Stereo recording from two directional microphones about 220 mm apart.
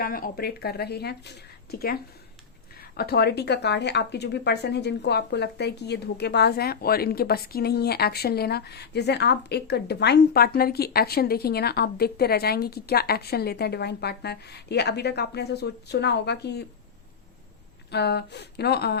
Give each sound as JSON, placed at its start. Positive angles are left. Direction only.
{"t": 0.0, "sound": "speech", "side_deg": 40}
{"t": 17.9, "sound": "speech", "side_deg": 50}